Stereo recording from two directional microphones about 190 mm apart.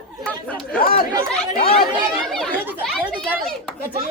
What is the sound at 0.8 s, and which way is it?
Chatter, 50° left (ahead or behind).